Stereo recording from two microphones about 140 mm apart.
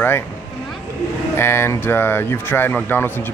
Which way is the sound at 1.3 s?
15° left (ahead or behind).